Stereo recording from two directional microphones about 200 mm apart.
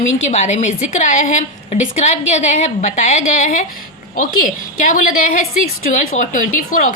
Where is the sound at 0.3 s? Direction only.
35° left (ahead or behind).